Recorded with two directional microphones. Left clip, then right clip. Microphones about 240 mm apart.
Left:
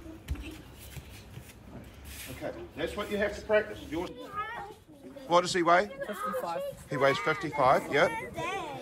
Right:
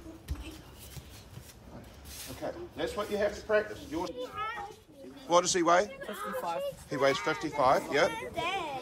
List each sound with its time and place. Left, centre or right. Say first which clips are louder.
2.1 s a man's voice: even; centre
4.2 s a child's voice: right 1 dB; centre